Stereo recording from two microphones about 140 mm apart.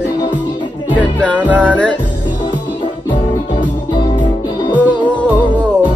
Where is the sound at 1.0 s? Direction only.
10° left (ahead or behind).